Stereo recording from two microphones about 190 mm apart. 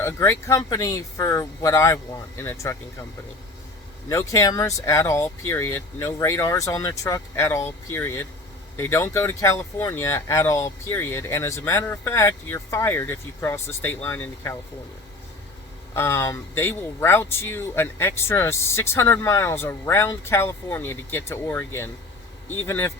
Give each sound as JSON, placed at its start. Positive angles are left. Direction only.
{"t": 0.0, "sound": "speech", "side_deg": 15}
{"t": 4.1, "sound": "speech", "side_deg": 15}
{"t": 16.0, "sound": "speech", "side_deg": 15}